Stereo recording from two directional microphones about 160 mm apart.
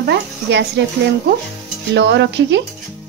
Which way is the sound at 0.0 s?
90° right.